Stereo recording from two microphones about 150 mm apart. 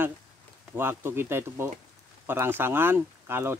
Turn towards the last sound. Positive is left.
turn(degrees=-15)  # may be behind; listen again after turning